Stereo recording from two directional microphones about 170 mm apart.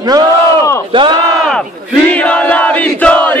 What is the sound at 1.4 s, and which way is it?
Battle cry, 5° left (ahead or behind).